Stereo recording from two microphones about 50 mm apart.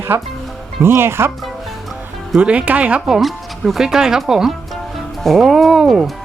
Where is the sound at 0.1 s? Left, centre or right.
Right.